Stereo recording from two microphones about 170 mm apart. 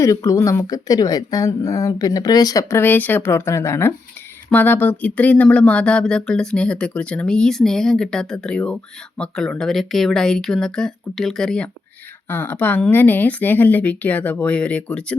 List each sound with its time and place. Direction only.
0.0 s speech: 20° left (ahead or behind)